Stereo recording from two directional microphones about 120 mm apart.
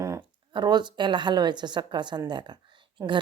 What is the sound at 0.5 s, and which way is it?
Speech, 40° right (ahead or behind).